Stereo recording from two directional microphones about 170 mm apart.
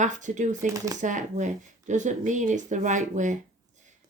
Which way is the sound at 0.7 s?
20° right (ahead or behind).